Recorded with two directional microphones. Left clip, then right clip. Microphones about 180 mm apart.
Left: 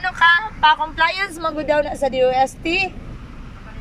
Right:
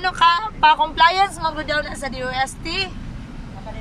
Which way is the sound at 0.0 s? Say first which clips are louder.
Left 1 dB; 15° right (ahead or behind).